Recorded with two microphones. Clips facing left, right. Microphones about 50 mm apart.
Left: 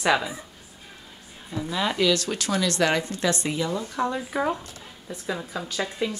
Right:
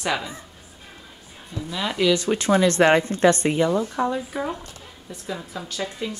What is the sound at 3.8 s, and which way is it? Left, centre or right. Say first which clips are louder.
Speech: right 3 dB; centre.